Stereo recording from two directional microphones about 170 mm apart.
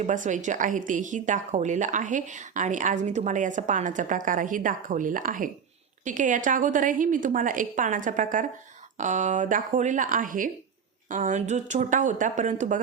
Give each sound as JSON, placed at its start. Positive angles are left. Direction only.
{"t": 0.0, "sound": "a woman's voice", "side_deg": -45}